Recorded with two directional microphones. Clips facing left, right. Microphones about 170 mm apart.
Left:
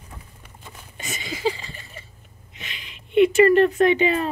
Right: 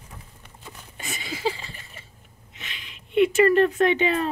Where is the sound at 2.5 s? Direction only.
Centre (ahead or behind).